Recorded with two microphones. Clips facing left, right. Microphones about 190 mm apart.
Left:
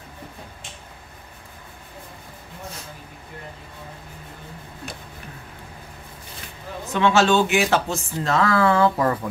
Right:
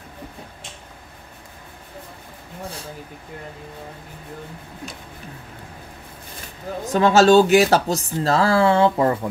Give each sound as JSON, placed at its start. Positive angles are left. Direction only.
{"t": 6.9, "sound": "speech", "side_deg": -40}